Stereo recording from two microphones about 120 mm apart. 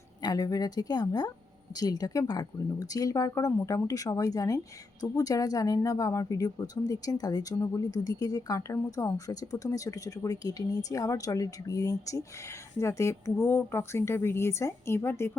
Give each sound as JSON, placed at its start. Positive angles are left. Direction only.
{"t": 0.2, "sound": "speech", "side_deg": 35}